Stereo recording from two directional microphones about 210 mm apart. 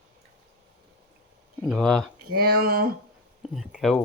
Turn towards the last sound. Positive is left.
turn(degrees=0)  # may be behind; listen again after turning